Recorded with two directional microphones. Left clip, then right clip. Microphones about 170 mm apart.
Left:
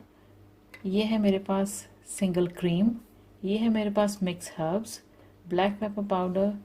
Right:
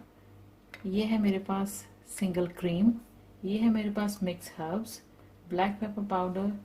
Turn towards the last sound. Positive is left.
turn(degrees=45)  # may be behind; listen again after turning